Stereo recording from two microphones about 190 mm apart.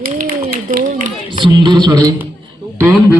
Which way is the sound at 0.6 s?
45° right (ahead or behind).